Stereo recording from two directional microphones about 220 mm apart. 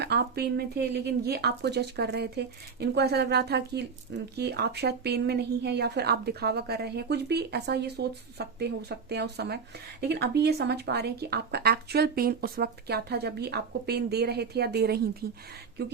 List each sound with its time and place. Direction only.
0.0 s speech: 50° right (ahead or behind)